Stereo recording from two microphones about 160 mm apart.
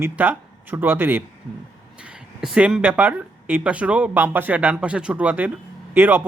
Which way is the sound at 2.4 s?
5° right (ahead or behind).